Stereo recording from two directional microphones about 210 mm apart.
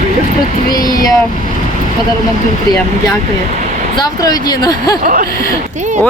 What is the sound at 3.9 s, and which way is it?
Speech, 20° left (ahead or behind).